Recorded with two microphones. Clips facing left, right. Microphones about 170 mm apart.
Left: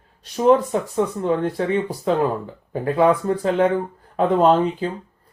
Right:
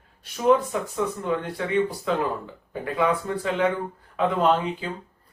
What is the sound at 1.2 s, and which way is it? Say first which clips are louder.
Speech: left 6 dB; 35° left (ahead or behind).